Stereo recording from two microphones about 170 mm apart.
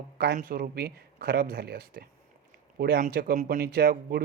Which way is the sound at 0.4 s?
60° right (ahead or behind).